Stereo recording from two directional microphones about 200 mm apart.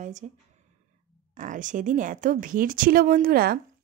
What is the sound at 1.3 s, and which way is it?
A woman's voice, 40° right (ahead or behind).